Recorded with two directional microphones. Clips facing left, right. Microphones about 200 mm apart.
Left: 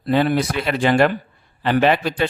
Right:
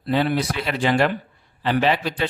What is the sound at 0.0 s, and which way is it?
Speech, 50° left (ahead or behind).